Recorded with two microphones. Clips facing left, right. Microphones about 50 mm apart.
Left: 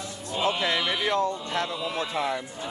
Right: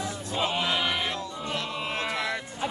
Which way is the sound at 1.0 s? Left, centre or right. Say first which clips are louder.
Left 8 dB; left.